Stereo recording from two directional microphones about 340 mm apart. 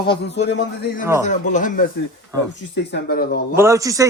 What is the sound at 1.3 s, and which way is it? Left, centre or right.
A man's voice, left.